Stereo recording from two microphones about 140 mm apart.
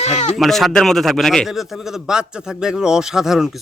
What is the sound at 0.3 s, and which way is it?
Speech, centre (ahead or behind).